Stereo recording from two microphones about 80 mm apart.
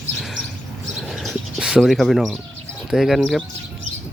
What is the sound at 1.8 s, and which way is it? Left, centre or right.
Speech, centre.